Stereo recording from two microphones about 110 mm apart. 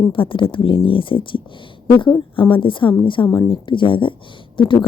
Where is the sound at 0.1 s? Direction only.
50° left (ahead or behind).